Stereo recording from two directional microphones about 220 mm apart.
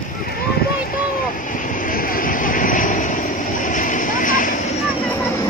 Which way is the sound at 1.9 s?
40° left (ahead or behind).